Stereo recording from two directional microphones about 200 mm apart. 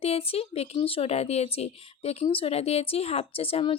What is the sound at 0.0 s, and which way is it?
A woman's voice, 30° left (ahead or behind).